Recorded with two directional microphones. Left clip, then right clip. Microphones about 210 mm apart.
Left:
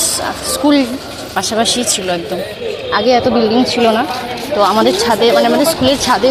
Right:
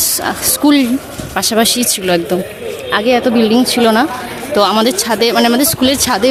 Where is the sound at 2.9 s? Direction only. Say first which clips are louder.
Left 1 dB; 25° right (ahead or behind).